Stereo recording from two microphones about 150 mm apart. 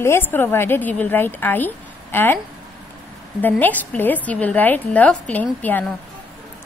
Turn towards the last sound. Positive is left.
turn(degrees=10)  # may be behind; listen again after turning